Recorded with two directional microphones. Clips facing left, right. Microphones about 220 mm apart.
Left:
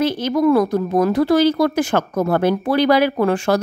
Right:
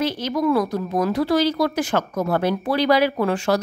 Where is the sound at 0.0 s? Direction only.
50° left (ahead or behind).